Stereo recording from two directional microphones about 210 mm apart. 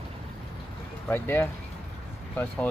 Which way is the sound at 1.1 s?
10° left (ahead or behind).